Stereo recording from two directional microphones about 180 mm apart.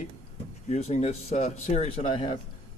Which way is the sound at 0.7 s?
40° left (ahead or behind).